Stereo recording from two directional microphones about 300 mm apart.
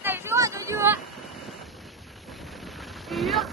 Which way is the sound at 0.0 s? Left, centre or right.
Centre.